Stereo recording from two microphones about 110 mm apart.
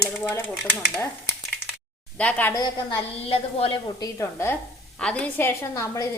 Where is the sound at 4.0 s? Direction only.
30° left (ahead or behind).